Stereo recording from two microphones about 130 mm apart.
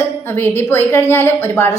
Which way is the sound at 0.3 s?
15° left (ahead or behind).